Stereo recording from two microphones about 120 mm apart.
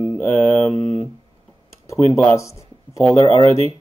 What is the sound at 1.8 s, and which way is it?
Speech, 25° left (ahead or behind).